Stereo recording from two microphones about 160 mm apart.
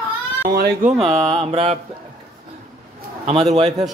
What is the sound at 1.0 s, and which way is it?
Mantra, 40° right (ahead or behind).